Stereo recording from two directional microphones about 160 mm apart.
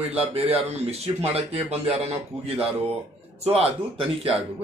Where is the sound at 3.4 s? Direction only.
40° right (ahead or behind).